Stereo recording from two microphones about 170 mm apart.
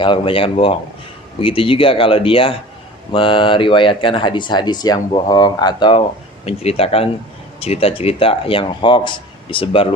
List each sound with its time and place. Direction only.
0.0 s speech: 30° left (ahead or behind)
6.4 s speech: 35° left (ahead or behind)